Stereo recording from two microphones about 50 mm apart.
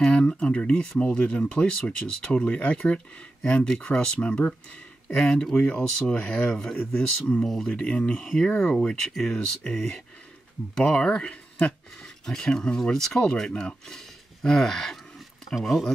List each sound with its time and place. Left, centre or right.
0.0 s speech: centre
5.0 s speech: left
5.3 s speech: centre
7.4 s speech: centre
7.7 s speech: centre
13.2 s speech: centre
13.8 s a sound: centre